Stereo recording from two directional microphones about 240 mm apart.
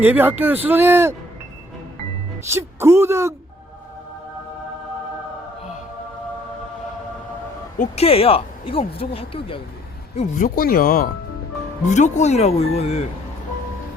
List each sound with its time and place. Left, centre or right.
0.0 s speech: centre
2.5 s speech: centre
7.8 s speech: left
10.2 s speech: left